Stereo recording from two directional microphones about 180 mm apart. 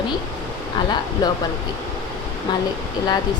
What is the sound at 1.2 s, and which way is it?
Speech, 20° left (ahead or behind).